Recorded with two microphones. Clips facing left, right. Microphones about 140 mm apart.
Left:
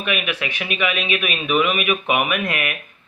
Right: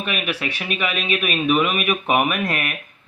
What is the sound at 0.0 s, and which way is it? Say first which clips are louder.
Speech: left 1 dB; 35° right (ahead or behind).